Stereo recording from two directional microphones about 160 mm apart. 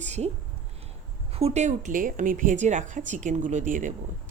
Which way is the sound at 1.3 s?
40° right (ahead or behind).